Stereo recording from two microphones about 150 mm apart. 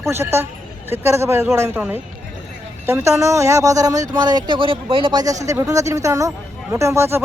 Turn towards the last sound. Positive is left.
turn(degrees=-15)  # may be behind; listen again after turning